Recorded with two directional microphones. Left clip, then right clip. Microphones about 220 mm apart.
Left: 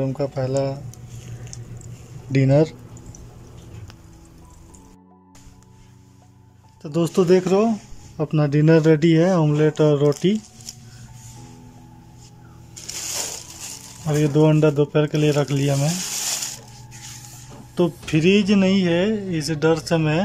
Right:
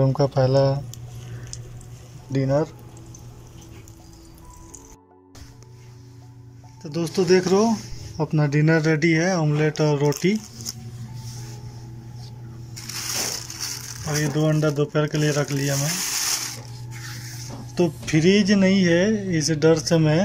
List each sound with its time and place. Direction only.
0.0 s speech: 5° right (ahead or behind)
2.3 s speech: 20° left (ahead or behind)
6.8 s speech: 10° left (ahead or behind)
14.0 s speech: 15° left (ahead or behind)
17.7 s speech: 5° left (ahead or behind)